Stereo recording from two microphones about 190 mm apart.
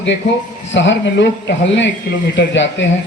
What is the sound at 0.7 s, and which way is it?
A man's voice, 70° left (ahead or behind).